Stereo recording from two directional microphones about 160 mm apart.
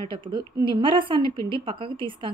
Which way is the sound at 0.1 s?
30° right (ahead or behind).